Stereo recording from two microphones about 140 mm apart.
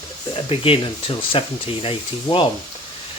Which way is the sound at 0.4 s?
40° left (ahead or behind).